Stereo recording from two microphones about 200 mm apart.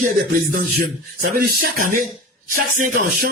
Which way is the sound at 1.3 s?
45° right (ahead or behind).